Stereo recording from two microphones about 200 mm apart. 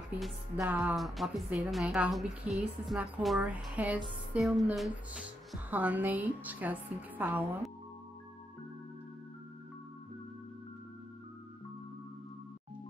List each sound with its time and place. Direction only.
0.6 s music: 15° right (ahead or behind)
0.8 s a woman's voice: centre (ahead or behind)